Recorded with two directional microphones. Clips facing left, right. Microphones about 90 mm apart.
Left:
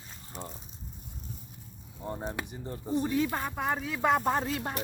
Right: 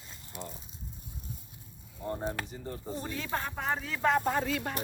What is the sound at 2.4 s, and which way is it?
Speech, 15° left (ahead or behind).